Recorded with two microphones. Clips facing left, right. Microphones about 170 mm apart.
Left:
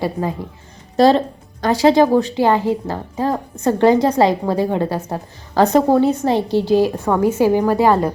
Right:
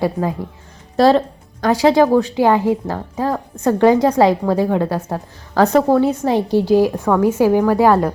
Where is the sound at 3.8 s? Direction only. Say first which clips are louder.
Right 1 dB; 10° right (ahead or behind).